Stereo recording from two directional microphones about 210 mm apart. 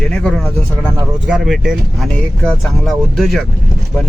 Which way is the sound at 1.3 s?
Centre (ahead or behind).